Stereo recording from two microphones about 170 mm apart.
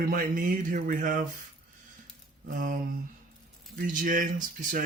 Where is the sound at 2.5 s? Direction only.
55° right (ahead or behind).